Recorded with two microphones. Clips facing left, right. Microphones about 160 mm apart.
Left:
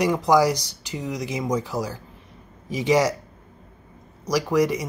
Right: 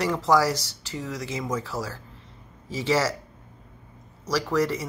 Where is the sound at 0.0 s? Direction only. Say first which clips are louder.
Left 3 dB; 15° left (ahead or behind).